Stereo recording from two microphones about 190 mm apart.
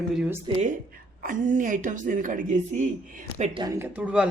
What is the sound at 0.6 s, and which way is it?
A woman's voice, 45° right (ahead or behind).